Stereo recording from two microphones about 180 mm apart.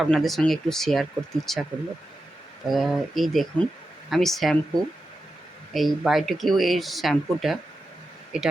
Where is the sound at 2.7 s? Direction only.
Centre (ahead or behind).